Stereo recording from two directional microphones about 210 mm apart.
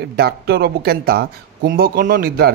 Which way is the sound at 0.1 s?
50° right (ahead or behind).